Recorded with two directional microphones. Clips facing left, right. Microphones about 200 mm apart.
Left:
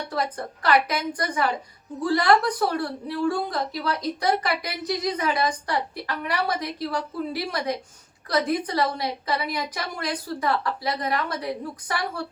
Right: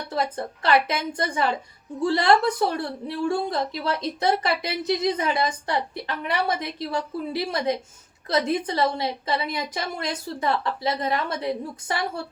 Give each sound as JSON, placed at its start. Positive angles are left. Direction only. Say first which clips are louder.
{"t": 0.1, "sound": "a woman's voice", "louder": "right 5 dB", "side_deg": -25}